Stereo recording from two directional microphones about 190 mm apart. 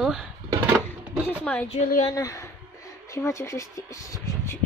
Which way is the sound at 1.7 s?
40° left (ahead or behind).